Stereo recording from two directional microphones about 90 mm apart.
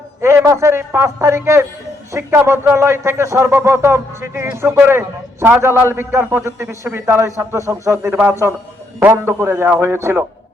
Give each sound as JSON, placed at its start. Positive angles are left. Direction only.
{"t": 0.2, "sound": "a man's voice", "side_deg": -30}
{"t": 8.0, "sound": "speech", "side_deg": -25}